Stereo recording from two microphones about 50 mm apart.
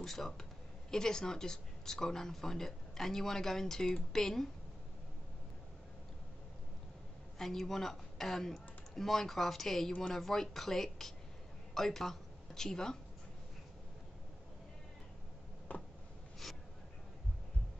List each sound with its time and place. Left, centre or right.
0.0 s speech: centre
7.3 s speech: centre
15.7 s a sound: left